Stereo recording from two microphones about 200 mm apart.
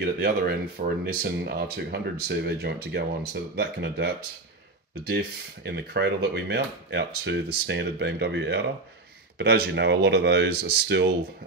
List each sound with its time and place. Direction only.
0.0 s speech: 50° right (ahead or behind)